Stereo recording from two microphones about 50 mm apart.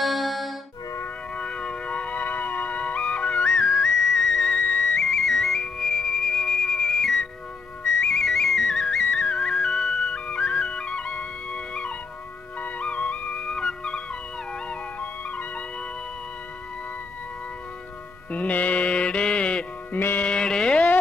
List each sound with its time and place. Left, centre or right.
0.0 s music: centre
1.3 s music: left
3.4 s music: centre
7.8 s flute: centre
12.5 s music: left
13.5 s music: centre
15.0 s music: left
18.3 s music: left
19.9 s music: left
20.2 s music: centre